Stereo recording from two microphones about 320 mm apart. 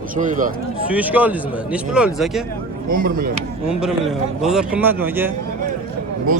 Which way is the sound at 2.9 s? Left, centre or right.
Right.